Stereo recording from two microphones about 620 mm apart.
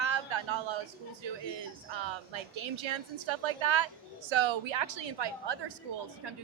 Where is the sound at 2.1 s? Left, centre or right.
Right.